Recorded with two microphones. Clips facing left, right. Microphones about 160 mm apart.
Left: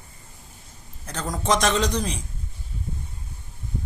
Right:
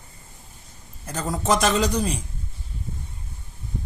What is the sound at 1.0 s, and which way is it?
A woman's voice, 10° right (ahead or behind).